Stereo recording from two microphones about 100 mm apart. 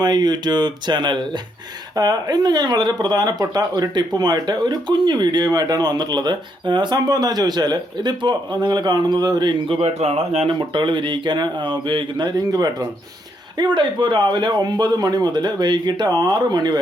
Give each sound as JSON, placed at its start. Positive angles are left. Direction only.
{"t": 0.0, "sound": "speech", "side_deg": -45}
{"t": 9.6, "sound": "speech", "side_deg": -75}
{"t": 10.6, "sound": "speech", "side_deg": -55}
{"t": 13.6, "sound": "speech", "side_deg": -50}